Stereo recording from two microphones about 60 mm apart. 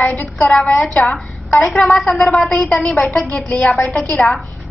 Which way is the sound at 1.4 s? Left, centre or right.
Left.